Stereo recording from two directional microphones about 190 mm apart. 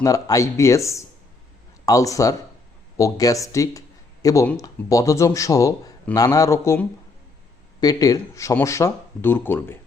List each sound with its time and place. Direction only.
0.0 s a man's voice: 15° left (ahead or behind)